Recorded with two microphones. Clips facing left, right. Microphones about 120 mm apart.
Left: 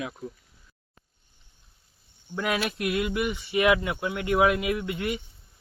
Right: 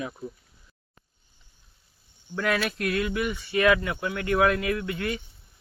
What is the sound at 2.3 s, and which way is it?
Speech, 15° left (ahead or behind).